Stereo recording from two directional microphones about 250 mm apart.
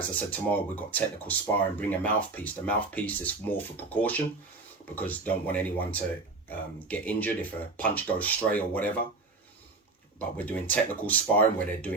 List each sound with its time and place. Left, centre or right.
0.1 s speech: centre
10.2 s speech: centre